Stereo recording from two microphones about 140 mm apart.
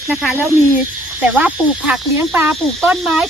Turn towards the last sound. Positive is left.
turn(degrees=-5)  # may be behind; listen again after turning